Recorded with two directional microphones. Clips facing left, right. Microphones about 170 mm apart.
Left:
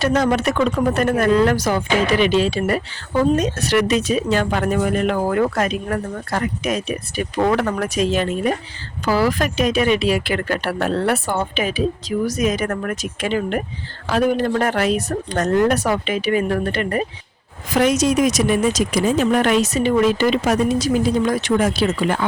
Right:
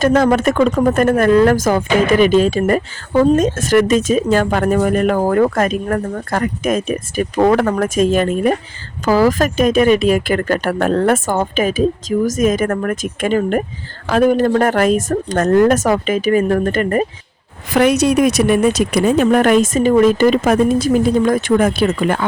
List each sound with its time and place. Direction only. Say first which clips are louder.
0.0 s speech: right 5 dB; 50° right (ahead or behind)
17.7 s speech: right 4 dB; 65° right (ahead or behind)